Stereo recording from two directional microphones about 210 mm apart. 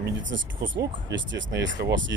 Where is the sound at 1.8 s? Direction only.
60° right (ahead or behind).